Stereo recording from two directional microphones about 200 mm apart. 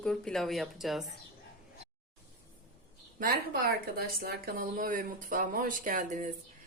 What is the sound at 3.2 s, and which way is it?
A woman's voice, 45° right (ahead or behind).